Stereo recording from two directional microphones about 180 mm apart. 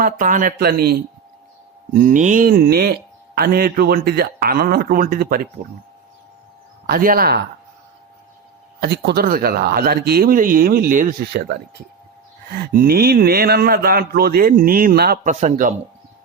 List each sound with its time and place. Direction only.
0.0 s speech: 45° right (ahead or behind)
1.9 s speech: 45° right (ahead or behind)
6.8 s speech: 55° right (ahead or behind)
8.8 s speech: 60° right (ahead or behind)
12.7 s speech: 55° right (ahead or behind)
15.3 s speech: 45° right (ahead or behind)